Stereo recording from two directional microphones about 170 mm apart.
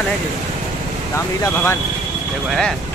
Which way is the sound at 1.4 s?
15° left (ahead or behind).